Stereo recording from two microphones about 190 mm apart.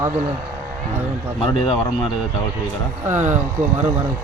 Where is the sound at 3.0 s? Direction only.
10° right (ahead or behind).